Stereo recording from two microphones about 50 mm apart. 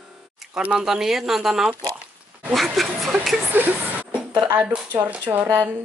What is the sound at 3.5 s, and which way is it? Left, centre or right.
Speech, right.